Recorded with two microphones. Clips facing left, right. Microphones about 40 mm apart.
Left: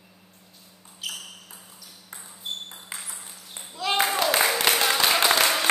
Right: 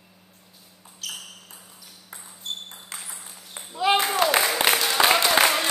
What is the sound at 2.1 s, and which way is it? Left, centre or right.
Ping, centre.